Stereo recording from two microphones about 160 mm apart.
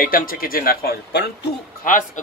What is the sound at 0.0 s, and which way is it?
Speech, 60° left (ahead or behind).